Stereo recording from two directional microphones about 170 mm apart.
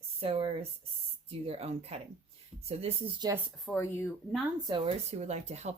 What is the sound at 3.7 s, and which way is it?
Speech, 15° left (ahead or behind).